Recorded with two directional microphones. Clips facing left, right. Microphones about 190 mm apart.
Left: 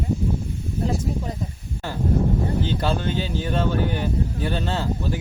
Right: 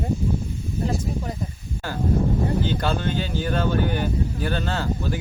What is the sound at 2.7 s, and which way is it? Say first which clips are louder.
Speech: even; centre (ahead or behind).